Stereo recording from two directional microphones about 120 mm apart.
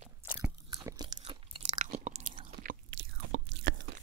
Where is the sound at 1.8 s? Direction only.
75° right (ahead or behind).